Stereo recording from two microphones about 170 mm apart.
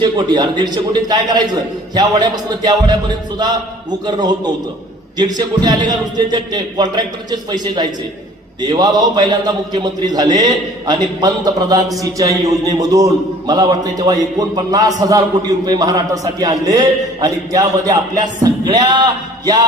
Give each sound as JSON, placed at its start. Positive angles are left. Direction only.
{"t": 0.0, "sound": "a man's voice", "side_deg": -25}
{"t": 4.0, "sound": "a man's voice", "side_deg": -25}